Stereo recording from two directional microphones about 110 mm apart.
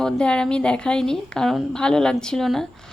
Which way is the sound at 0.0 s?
10° left (ahead or behind).